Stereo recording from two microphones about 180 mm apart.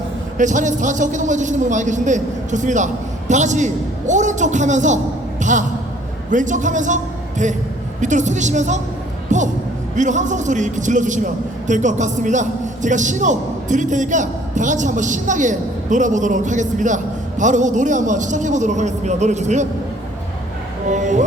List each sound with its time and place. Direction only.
0.3 s a man's voice: 45° right (ahead or behind)
5.4 s basketball bounce: 45° right (ahead or behind)
6.3 s a man's voice: 45° right (ahead or behind)
20.9 s a man's voice: 45° right (ahead or behind)